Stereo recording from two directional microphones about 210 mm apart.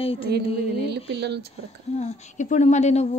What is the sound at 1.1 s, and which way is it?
Speech, 55° right (ahead or behind).